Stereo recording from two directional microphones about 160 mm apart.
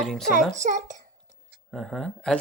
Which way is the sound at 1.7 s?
5° left (ahead or behind).